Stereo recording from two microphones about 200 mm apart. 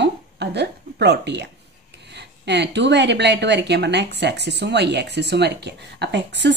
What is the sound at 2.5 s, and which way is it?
A woman's voice, 60° right (ahead or behind).